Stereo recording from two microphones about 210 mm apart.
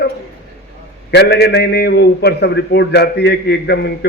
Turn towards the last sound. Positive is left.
turn(degrees=50)  # may be behind; listen again after turning